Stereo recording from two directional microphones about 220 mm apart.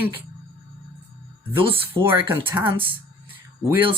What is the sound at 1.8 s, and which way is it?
Speech, 10° right (ahead or behind).